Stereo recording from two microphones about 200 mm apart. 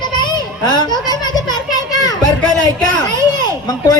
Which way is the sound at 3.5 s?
20° left (ahead or behind).